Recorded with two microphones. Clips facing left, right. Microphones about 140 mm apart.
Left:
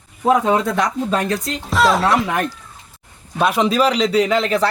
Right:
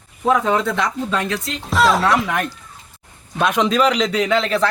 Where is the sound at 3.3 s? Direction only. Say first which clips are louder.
Left 1 dB; 5° left (ahead or behind).